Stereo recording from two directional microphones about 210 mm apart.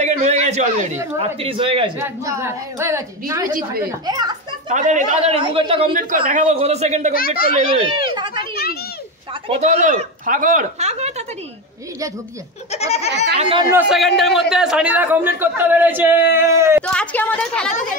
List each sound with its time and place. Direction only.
0.0 s a sound: 35° right (ahead or behind)
1.1 s speech: 25° right (ahead or behind)
2.0 s speech: 10° right (ahead or behind)
4.6 s speech: 35° right (ahead or behind)
7.2 s a child's voice: 45° left (ahead or behind)
7.7 s speech: 20° right (ahead or behind)
9.5 s speech: 35° right (ahead or behind)
12.7 s a child's voice: 30° left (ahead or behind)
13.4 s speech: 25° right (ahead or behind)
13.7 s speech: 5° right (ahead or behind)
16.8 s a woman's voice: 5° left (ahead or behind)